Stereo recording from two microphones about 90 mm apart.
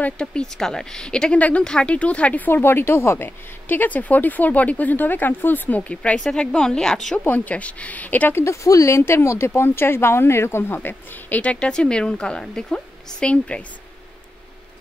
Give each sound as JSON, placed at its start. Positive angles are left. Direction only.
{"t": 0.0, "sound": "a woman's voice", "side_deg": 10}
{"t": 7.2, "sound": "a woman's voice", "side_deg": 20}